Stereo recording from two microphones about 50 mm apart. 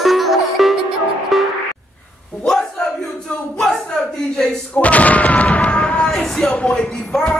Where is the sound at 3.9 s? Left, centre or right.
Centre.